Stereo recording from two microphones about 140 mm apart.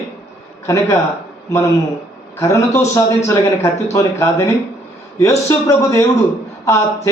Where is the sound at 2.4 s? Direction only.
20° left (ahead or behind).